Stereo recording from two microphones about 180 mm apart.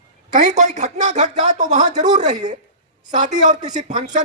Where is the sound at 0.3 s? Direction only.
40° right (ahead or behind).